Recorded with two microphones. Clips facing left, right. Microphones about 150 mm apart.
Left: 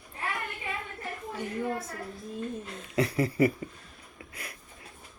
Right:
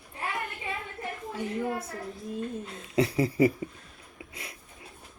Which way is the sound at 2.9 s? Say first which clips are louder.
Right 2 dB; 25° right (ahead or behind).